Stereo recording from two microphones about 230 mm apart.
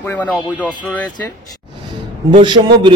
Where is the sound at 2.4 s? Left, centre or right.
Centre.